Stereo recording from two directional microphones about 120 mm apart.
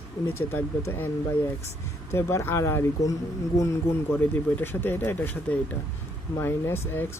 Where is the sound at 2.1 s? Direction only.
20° left (ahead or behind).